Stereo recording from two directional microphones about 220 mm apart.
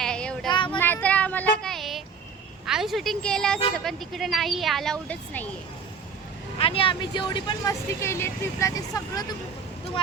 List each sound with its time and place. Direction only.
0.0 s a sound: 5° left (ahead or behind)
0.5 s child singing: 20° left (ahead or behind)
0.8 s child singing: 10° left (ahead or behind)
2.6 s speech: centre (ahead or behind)
6.6 s speech: 25° left (ahead or behind)